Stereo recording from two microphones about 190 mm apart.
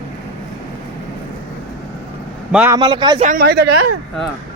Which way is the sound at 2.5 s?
10° right (ahead or behind).